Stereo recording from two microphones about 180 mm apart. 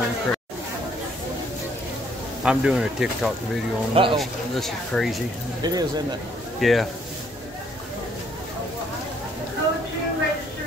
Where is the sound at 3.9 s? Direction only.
30° right (ahead or behind).